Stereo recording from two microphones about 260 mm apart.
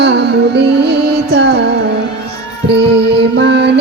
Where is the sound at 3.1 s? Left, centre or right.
Right.